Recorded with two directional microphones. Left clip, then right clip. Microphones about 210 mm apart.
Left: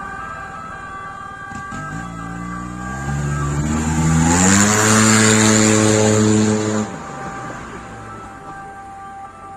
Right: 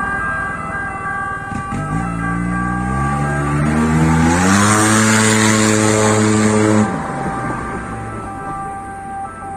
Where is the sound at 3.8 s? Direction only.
55° left (ahead or behind).